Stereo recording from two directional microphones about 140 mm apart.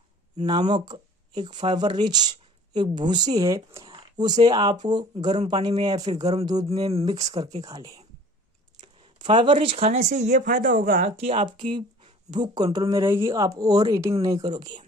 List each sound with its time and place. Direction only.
0.5 s speech: 35° right (ahead or behind)
3.9 s speech: 30° right (ahead or behind)
6.8 s speech: 45° right (ahead or behind)
7.6 s speech: 25° right (ahead or behind)
9.2 s speech: 35° right (ahead or behind)
10.0 s speech: 55° right (ahead or behind)
11.2 s speech: 40° right (ahead or behind)
12.9 s speech: 20° right (ahead or behind)